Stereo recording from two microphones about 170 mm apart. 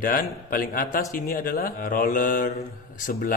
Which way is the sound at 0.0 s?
55° left (ahead or behind).